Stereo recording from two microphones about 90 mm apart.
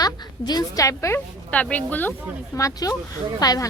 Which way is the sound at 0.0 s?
45° left (ahead or behind).